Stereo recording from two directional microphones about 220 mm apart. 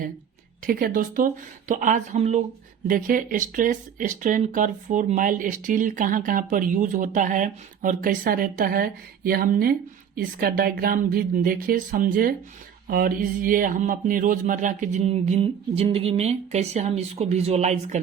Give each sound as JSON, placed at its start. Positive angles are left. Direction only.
{"t": 0.6, "sound": "speech", "side_deg": -40}